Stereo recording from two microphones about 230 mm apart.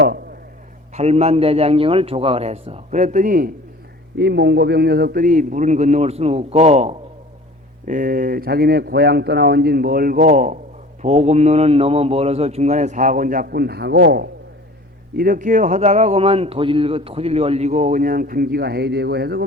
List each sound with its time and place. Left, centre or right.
0.9 s a man's voice: right